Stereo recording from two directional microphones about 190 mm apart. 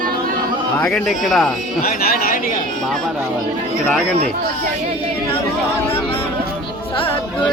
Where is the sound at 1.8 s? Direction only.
50° left (ahead or behind).